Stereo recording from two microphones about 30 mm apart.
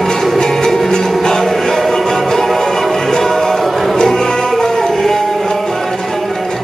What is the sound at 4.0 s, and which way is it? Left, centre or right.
Music, centre.